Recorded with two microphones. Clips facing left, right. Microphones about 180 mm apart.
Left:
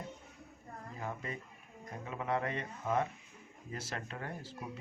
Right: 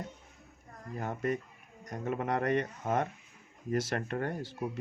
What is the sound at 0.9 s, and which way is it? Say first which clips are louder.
A man's voice: right 9 dB; 70° right (ahead or behind).